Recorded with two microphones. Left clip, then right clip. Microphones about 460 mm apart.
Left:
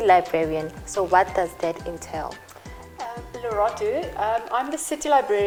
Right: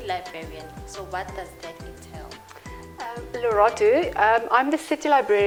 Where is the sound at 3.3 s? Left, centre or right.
Right.